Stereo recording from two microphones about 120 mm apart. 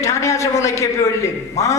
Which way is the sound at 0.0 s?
25° left (ahead or behind).